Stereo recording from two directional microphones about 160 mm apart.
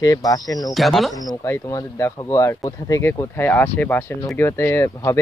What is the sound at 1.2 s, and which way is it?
Speech, 20° left (ahead or behind).